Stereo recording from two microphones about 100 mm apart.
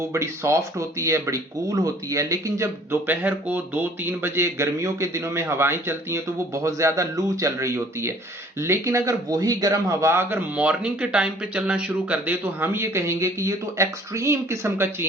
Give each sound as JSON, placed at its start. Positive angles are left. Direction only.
{"t": 0.1, "sound": "speech", "side_deg": -30}
{"t": 3.1, "sound": "a man's voice", "side_deg": -15}
{"t": 10.6, "sound": "speech", "side_deg": -10}